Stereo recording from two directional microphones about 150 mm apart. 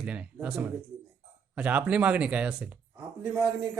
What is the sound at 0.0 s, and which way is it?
Speech, 10° right (ahead or behind).